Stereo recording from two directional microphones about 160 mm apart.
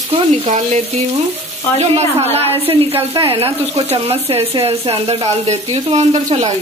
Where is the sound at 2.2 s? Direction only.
40° right (ahead or behind).